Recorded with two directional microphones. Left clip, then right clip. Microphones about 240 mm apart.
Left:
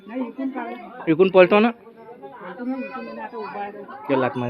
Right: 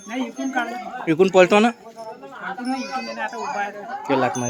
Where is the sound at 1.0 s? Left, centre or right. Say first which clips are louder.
Left 1 dB; centre.